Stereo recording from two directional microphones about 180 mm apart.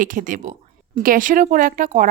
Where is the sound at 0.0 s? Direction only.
50° right (ahead or behind).